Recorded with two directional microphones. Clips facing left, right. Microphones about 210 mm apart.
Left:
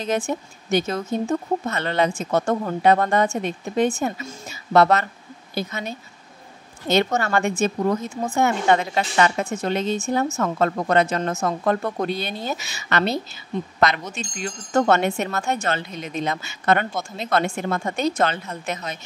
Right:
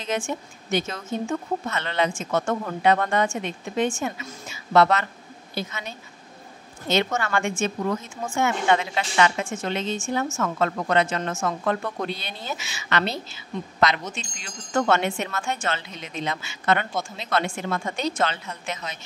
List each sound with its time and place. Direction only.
0.0 s a woman's voice: 40° left (ahead or behind)
14.3 s a woman's voice: 40° left (ahead or behind)